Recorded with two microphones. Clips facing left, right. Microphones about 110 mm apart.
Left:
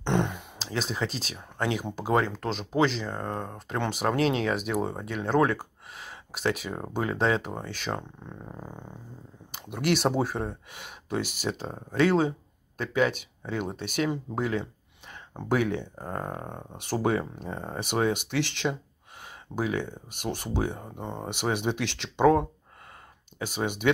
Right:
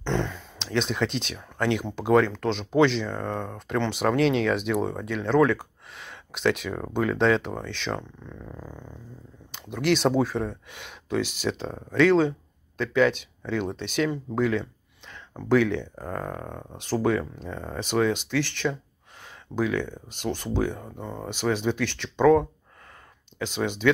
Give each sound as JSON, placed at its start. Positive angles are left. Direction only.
{"t": 0.0, "sound": "a sound", "side_deg": 20}
{"t": 0.6, "sound": "speech", "side_deg": 5}
{"t": 8.3, "sound": "purr", "side_deg": 25}
{"t": 9.5, "sound": "speech", "side_deg": 10}
{"t": 11.1, "sound": "speech", "side_deg": 50}
{"t": 11.6, "sound": "speech", "side_deg": 10}